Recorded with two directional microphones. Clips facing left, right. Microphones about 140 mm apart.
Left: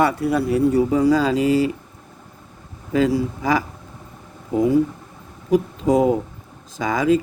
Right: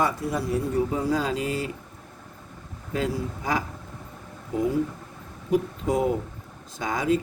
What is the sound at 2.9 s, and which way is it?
Speech, 90° left.